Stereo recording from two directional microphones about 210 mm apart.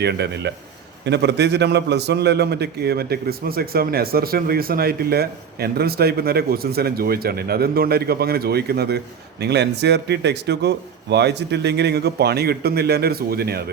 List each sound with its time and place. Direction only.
0.0 s a man's voice: 50° right (ahead or behind)